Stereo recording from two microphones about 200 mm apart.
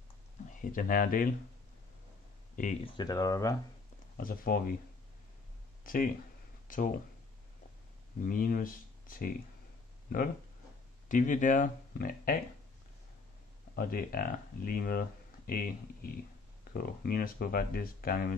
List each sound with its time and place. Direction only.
0.6 s speech: 40° left (ahead or behind)
2.5 s speech: 35° left (ahead or behind)
3.0 s speech: 20° left (ahead or behind)
4.2 s speech: 45° left (ahead or behind)
5.9 s speech: 45° left (ahead or behind)
8.2 s speech: 45° left (ahead or behind)
13.7 s speech: 45° left (ahead or behind)
16.7 s speech: 50° left (ahead or behind)